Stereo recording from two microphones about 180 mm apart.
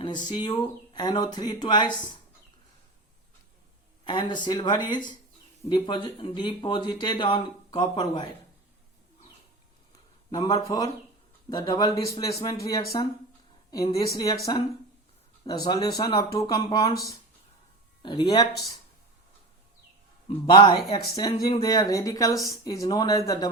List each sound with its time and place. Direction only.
0.0 s speech: 25° left (ahead or behind)
4.0 s speech: 25° left (ahead or behind)
10.3 s speech: 20° left (ahead or behind)
20.2 s speech: 25° left (ahead or behind)